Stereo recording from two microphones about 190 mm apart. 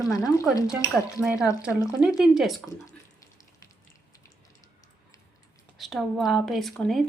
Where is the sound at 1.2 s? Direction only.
5° right (ahead or behind).